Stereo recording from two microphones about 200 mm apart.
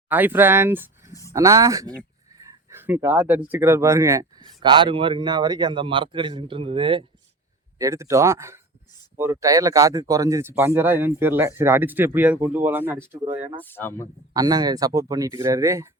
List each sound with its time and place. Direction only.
0.1 s speech: 10° right (ahead or behind); by 7.0 s 25° right (ahead or behind)
7.8 s speech: 15° right (ahead or behind)
13.2 s speech: 35° right (ahead or behind)
13.6 s speech: 10° left (ahead or behind)
14.3 s speech: 20° right (ahead or behind)